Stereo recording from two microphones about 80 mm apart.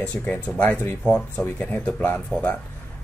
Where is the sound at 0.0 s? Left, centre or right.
Centre.